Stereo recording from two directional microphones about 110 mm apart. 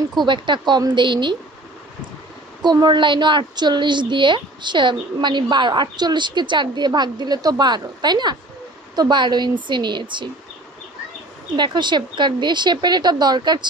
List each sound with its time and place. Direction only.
0.2 s a woman's voice: 45° right (ahead or behind)
2.6 s a woman's voice: 40° right (ahead or behind)
11.5 s a woman's voice: 45° right (ahead or behind)